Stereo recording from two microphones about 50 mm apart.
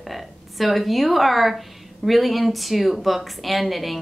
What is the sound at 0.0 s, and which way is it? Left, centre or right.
A woman's voice, centre.